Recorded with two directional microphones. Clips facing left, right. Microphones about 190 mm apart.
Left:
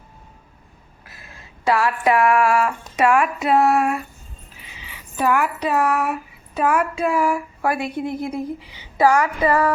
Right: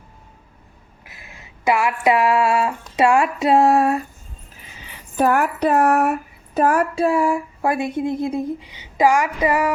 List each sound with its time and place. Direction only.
1.0 s speech: 15° right (ahead or behind); by 4.0 s 35° right (ahead or behind)
4.6 s speech: 50° right (ahead or behind); by 9.7 s 15° right (ahead or behind)